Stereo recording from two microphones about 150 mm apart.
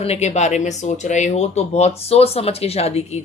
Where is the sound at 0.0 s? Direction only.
45° left (ahead or behind).